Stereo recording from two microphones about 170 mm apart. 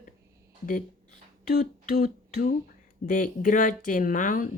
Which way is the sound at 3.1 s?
55° left (ahead or behind).